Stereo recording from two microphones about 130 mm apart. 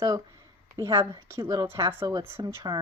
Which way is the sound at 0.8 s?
35° right (ahead or behind).